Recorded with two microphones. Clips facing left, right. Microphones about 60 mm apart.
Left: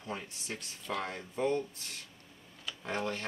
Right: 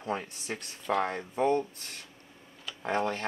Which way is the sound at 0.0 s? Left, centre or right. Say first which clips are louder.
Right 7 dB; right.